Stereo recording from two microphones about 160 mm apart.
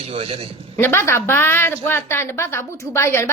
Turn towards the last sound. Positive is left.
turn(degrees=15)  # may be behind; listen again after turning